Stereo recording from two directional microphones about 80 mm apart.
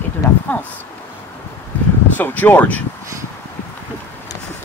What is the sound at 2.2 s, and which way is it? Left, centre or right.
Speech, left.